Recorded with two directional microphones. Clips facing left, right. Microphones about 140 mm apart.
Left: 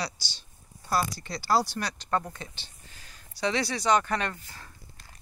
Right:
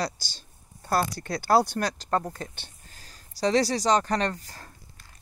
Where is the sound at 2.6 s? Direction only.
55° right (ahead or behind).